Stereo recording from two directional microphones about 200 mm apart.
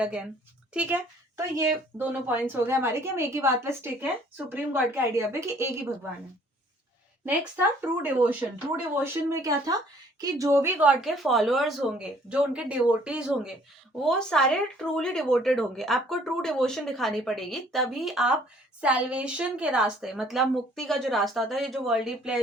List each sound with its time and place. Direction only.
0.0 s speech: 5° right (ahead or behind)
7.8 s speech: 10° right (ahead or behind)